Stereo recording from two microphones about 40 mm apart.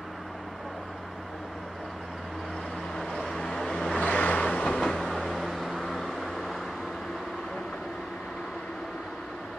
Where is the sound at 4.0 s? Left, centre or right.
Left; by 5.1 s centre.